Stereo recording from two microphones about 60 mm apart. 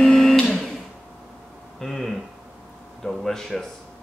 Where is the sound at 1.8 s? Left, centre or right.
Centre.